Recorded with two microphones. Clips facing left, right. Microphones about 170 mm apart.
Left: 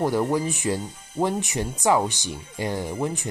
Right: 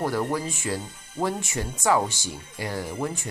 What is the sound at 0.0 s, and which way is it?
Speech, 15° left (ahead or behind).